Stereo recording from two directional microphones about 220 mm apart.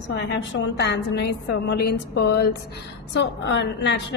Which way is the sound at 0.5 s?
55° left (ahead or behind).